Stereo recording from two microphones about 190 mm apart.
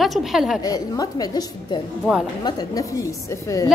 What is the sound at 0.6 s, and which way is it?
A woman's voice, 20° left (ahead or behind).